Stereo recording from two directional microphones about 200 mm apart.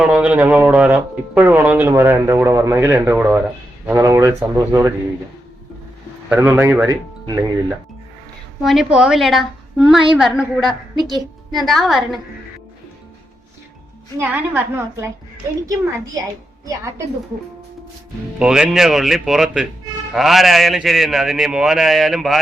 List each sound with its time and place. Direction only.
0.0 s speech: 5° right (ahead or behind)
6.2 s speech: 10° right (ahead or behind)
8.6 s a man's voice: centre (ahead or behind)
14.2 s speech: 10° right (ahead or behind)
18.3 s a man's voice: 5° right (ahead or behind)